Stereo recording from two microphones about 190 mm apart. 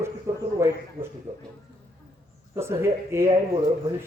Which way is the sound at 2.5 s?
15° right (ahead or behind).